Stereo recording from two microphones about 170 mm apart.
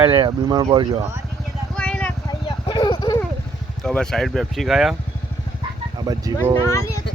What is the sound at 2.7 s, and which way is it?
Clip-clop, 25° left (ahead or behind).